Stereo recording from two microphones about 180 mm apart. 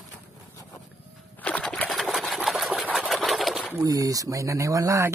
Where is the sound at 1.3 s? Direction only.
5° left (ahead or behind).